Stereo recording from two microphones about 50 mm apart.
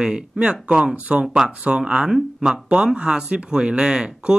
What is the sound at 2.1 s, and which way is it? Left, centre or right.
Speech, centre.